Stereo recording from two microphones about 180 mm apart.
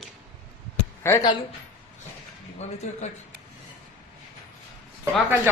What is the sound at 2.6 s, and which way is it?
Speech, 40° left (ahead or behind).